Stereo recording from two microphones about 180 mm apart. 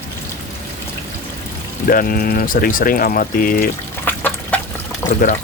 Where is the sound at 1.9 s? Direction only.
50° left (ahead or behind).